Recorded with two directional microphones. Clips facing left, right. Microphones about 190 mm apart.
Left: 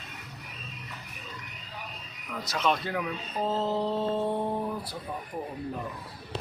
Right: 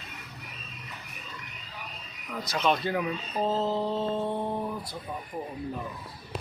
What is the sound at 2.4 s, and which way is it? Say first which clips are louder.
Speech: right 2 dB; centre (ahead or behind).